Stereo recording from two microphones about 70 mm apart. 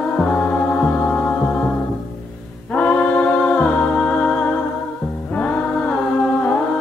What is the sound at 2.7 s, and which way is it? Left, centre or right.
Music, centre.